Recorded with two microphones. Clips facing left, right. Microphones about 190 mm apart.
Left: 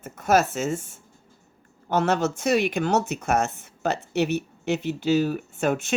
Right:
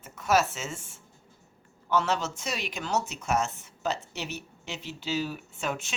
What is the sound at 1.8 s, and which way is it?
Speech, 55° left (ahead or behind).